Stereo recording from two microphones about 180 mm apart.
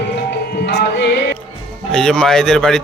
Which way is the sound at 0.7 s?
65° left (ahead or behind).